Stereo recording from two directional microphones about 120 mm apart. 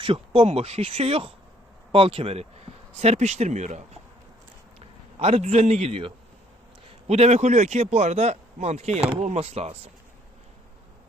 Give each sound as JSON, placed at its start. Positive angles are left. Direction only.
{"t": 0.0, "sound": "speech", "side_deg": -50}
{"t": 4.8, "sound": "a man's voice", "side_deg": -55}
{"t": 7.1, "sound": "speech", "side_deg": -65}